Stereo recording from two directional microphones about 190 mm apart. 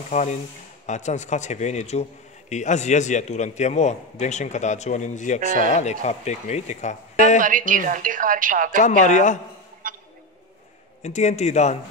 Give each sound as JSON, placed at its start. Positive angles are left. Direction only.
{"t": 0.1, "sound": "a man's voice", "side_deg": 40}
{"t": 7.3, "sound": "a woman's voice", "side_deg": -45}
{"t": 8.8, "sound": "a man's voice", "side_deg": 40}
{"t": 9.8, "sound": "a sound", "side_deg": -45}
{"t": 11.0, "sound": "a man's voice", "side_deg": 35}